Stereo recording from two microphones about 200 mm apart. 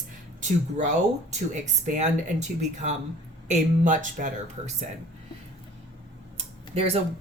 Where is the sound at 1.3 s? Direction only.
35° right (ahead or behind).